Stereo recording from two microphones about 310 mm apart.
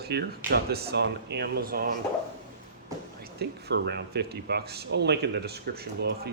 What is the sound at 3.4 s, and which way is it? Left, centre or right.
Speech, right.